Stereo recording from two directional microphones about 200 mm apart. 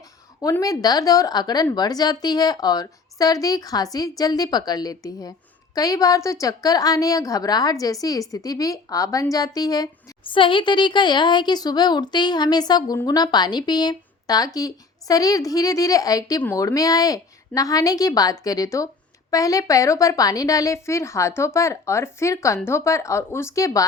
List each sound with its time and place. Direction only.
0.4 s a woman's voice: 15° left (ahead or behind)